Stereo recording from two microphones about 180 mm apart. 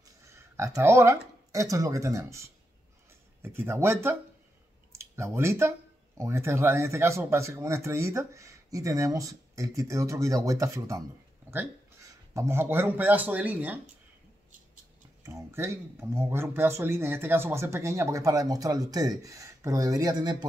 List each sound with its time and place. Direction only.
0.6 s speech: 15° right (ahead or behind)
12.4 s speech: 15° right (ahead or behind)
15.2 s speech: 15° right (ahead or behind)